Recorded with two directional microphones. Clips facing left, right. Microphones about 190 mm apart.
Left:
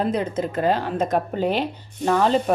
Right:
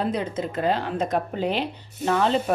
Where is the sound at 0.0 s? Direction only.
45° left (ahead or behind).